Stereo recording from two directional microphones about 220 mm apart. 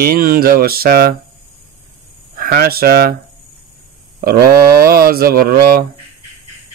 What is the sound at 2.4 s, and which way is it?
Speech, 40° right (ahead or behind).